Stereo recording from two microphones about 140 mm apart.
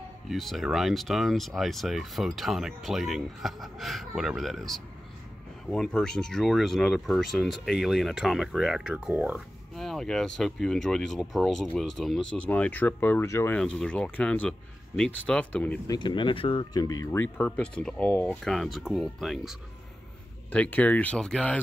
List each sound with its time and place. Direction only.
0.3 s speech: centre (ahead or behind)
9.8 s speech: centre (ahead or behind); by 13.6 s 20° left (ahead or behind)
13.6 s speech: 5° left (ahead or behind)
15.9 s speech: 35° left (ahead or behind)
16.8 s speech: 25° left (ahead or behind)
17.5 s speech: 5° left (ahead or behind)
20.5 s speech: 10° left (ahead or behind)